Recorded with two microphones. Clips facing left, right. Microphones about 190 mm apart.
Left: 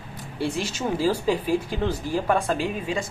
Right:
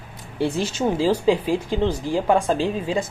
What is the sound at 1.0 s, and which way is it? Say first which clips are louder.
Speech: right 3 dB; 25° right (ahead or behind).